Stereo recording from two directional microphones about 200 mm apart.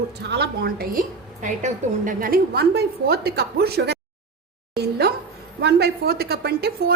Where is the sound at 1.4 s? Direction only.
40° right (ahead or behind).